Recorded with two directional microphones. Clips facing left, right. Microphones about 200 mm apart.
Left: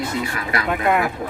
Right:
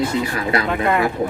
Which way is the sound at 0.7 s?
10° left (ahead or behind).